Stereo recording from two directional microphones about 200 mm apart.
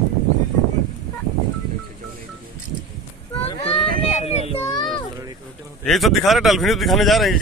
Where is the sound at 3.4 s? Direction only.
30° left (ahead or behind).